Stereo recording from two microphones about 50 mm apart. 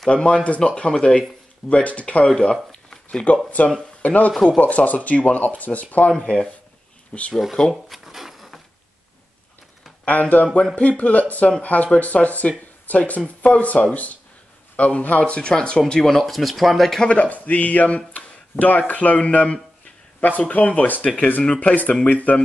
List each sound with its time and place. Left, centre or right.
0.1 s speech: left
2.9 s a sound: centre
3.6 s speech: left
6.1 s speech: left
7.9 s a sound: centre
10.3 s speech: left
15.9 s speech: centre
17.0 s speech: left